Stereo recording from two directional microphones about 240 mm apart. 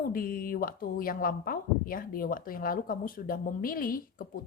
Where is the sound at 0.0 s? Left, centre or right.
Left.